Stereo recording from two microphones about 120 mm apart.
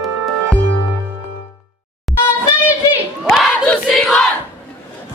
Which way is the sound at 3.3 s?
5° left (ahead or behind).